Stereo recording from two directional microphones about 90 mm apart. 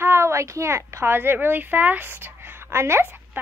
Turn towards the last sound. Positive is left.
turn(degrees=-30)  # may be behind; listen again after turning